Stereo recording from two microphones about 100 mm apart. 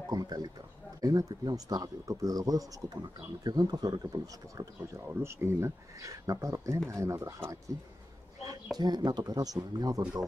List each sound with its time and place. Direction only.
0.1 s speech: 40° right (ahead or behind); by 7.5 s 25° right (ahead or behind)
8.7 s speech: 45° right (ahead or behind)